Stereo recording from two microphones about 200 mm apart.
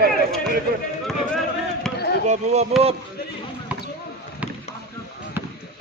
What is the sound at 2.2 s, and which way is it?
Speech, 35° right (ahead or behind).